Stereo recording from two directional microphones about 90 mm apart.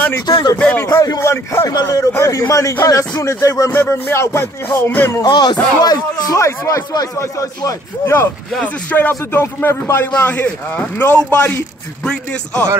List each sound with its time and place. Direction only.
0.6 s a man's voice: 15° left (ahead or behind)
1.2 s speech: 30° left (ahead or behind)
1.7 s a man's voice: 45° left (ahead or behind)
3.7 s speech: 25° left (ahead or behind)
5.2 s a man's voice: 55° left (ahead or behind); by 10.0 s 30° left (ahead or behind)
10.1 s a man's voice: 15° left (ahead or behind)